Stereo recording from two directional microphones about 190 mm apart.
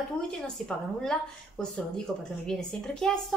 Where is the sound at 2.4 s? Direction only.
5° left (ahead or behind).